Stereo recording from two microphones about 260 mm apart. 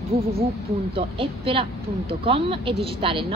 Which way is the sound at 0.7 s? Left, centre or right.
Right.